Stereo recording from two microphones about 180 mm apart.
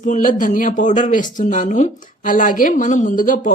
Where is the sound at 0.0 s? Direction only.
45° left (ahead or behind).